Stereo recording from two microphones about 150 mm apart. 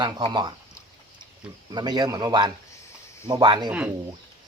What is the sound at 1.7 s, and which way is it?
Speech, 30° right (ahead or behind).